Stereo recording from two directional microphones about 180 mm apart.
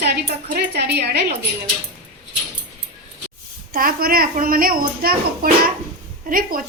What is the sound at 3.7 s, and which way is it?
A woman's voice, 55° right (ahead or behind).